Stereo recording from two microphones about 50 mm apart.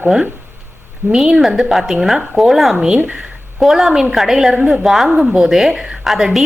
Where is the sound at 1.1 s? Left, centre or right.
Centre.